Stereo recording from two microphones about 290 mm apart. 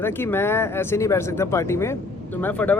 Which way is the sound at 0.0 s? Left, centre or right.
Centre.